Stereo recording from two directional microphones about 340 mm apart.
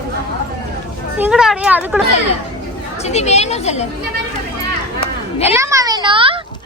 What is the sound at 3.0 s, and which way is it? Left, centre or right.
Speech, centre.